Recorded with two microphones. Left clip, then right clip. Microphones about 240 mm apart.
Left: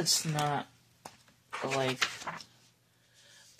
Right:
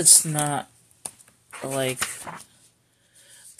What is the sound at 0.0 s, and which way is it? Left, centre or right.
Speech, right.